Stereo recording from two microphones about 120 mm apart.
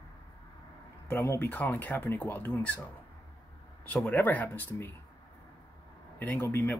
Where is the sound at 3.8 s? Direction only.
10° left (ahead or behind).